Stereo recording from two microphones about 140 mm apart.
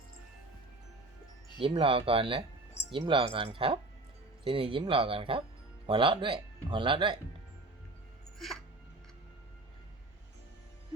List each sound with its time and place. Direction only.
1.5 s speech: 40° right (ahead or behind)